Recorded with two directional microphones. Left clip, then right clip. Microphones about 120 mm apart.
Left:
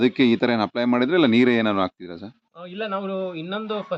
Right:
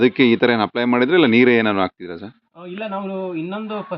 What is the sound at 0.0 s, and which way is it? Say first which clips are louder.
Speech: right 5 dB; 10° left (ahead or behind).